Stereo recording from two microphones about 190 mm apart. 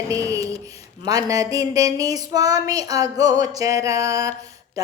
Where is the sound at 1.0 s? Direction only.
20° right (ahead or behind).